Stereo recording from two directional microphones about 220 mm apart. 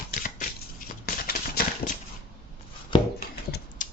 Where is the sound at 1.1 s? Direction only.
45° left (ahead or behind).